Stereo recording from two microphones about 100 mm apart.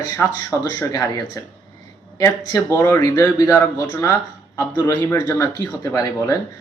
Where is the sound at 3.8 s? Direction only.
30° left (ahead or behind).